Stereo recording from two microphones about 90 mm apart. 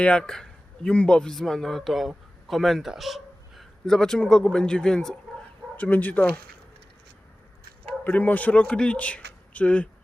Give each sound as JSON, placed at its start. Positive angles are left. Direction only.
{"t": 0.0, "sound": "speech", "side_deg": 10}
{"t": 8.0, "sound": "a man's voice", "side_deg": 15}